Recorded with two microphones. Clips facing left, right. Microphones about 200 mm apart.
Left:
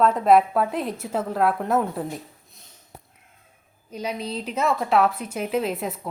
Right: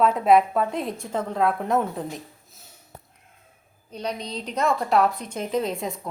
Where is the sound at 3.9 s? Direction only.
5° left (ahead or behind).